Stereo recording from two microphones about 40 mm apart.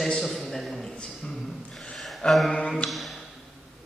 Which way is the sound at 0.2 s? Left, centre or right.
Centre.